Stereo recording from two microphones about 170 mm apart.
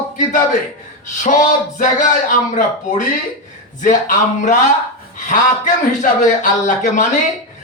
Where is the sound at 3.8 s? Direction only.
50° left (ahead or behind).